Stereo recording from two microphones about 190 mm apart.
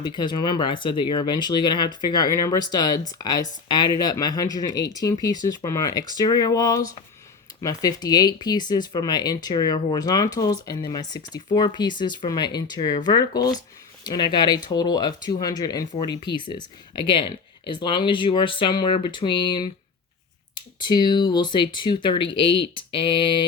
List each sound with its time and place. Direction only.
0.0 s speech: 25° left (ahead or behind)
20.7 s speech: 25° left (ahead or behind)